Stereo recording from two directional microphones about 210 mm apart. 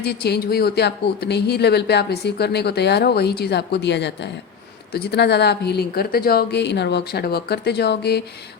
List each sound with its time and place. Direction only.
0.0 s speech: 50° left (ahead or behind)